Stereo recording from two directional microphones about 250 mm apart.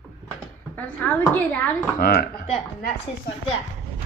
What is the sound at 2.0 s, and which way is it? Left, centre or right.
Speech, left.